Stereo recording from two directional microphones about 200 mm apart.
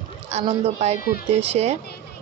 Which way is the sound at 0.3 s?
30° right (ahead or behind).